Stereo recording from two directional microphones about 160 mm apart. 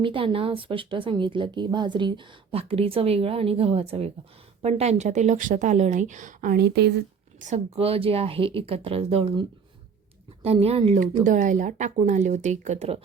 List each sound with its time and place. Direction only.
0.0 s speech: 30° right (ahead or behind); by 7.0 s 90° right
7.3 s speech: 45° right (ahead or behind)
11.2 s speech: 50° right (ahead or behind)